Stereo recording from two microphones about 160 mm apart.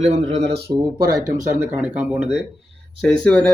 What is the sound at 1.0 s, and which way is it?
Speech, 65° right (ahead or behind).